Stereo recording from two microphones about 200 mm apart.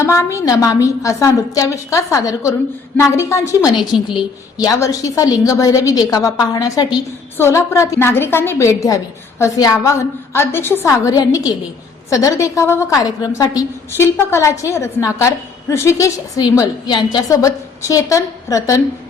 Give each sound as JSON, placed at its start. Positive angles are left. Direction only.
{"t": 0.0, "sound": "a woman's voice", "side_deg": 15}